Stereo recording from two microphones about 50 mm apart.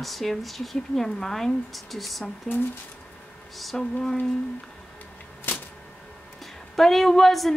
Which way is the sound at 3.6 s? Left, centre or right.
Centre.